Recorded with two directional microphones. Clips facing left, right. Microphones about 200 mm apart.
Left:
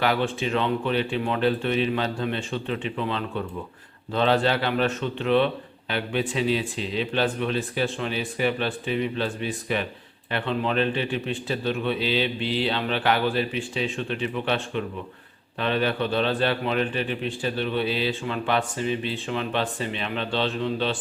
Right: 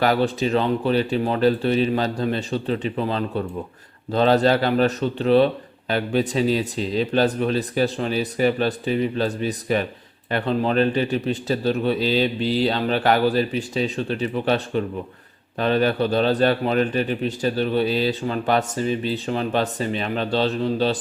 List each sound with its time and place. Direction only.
0.0 s a man's voice: 40° right (ahead or behind)